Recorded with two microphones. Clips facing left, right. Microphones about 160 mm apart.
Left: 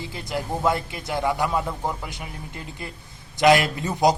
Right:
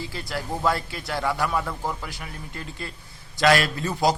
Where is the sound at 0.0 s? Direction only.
20° left (ahead or behind).